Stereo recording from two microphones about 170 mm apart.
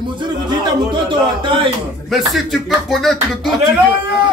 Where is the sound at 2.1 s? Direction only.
Centre (ahead or behind).